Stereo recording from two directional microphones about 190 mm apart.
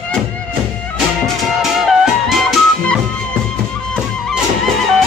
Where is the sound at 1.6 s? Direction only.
Centre (ahead or behind).